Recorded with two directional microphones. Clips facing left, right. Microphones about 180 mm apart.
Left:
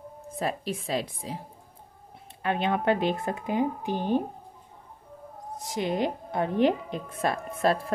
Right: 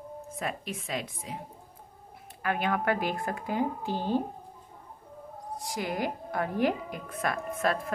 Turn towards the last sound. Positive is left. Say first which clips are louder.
# left 4 dB
turn(degrees=30)  # may be behind; listen again after turning